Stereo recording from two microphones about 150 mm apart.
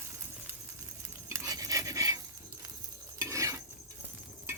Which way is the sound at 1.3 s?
25° right (ahead or behind).